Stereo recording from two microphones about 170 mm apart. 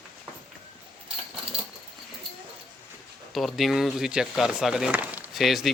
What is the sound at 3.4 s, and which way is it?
Speech, centre (ahead or behind).